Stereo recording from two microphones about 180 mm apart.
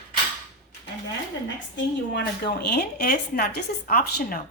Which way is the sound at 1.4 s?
75° left (ahead or behind).